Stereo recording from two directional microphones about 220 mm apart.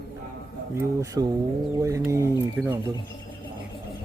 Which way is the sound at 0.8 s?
15° right (ahead or behind).